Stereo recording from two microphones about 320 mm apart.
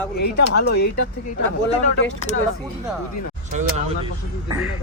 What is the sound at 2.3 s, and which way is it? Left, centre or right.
Speech, left.